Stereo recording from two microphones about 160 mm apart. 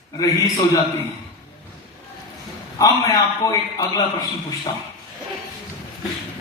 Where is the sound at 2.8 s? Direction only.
20° left (ahead or behind).